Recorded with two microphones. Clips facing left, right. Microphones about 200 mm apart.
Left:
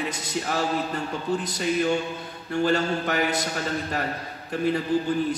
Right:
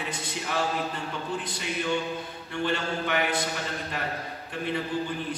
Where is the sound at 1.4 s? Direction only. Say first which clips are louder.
Left 7 dB; 40° left (ahead or behind).